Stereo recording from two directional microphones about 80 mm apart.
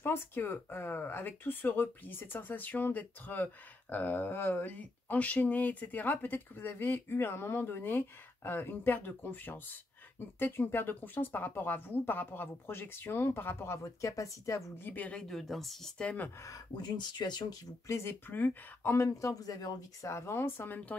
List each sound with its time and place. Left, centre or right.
0.0 s speech: left
14.0 s speech: left
14.9 s speech: centre
15.2 s speech: centre
16.0 s speech: centre
16.7 s speech: left
17.8 s speech: left
18.3 s speech: left
19.0 s speech: left
20.1 s speech: left